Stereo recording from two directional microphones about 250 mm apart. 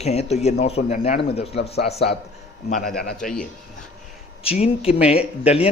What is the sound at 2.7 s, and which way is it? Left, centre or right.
Speech, left.